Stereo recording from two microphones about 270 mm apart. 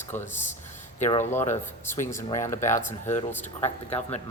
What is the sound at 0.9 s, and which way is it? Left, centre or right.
Speech, left.